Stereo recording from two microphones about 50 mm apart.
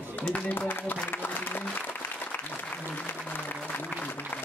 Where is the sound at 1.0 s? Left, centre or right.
Left.